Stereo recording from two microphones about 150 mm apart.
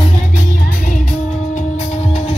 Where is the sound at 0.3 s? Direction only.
70° left (ahead or behind).